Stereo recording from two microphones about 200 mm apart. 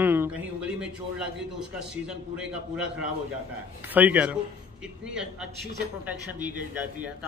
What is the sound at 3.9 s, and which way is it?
Speech, 10° right (ahead or behind).